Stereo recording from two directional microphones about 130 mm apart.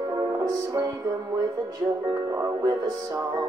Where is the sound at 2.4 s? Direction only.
30° right (ahead or behind).